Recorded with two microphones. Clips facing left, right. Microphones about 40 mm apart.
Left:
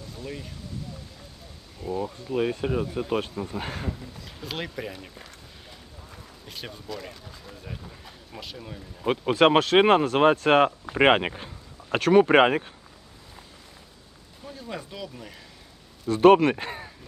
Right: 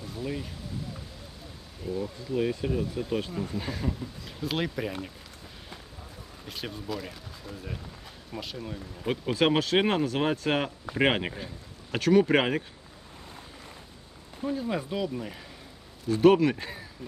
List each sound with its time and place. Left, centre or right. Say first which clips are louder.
0.1 s a sound: right 4 dB; centre
1.8 s speech: left 3 dB; centre
2.3 s speech: left 2 dB; left
3.8 s a man's voice: right 2 dB; centre
6.5 s a man's voice: right 2 dB; centre
9.4 s speech: left 6 dB; left
10.9 s speech: left 5 dB; left
14.5 s speech: right 6 dB; centre
16.0 s speech: left 4 dB; left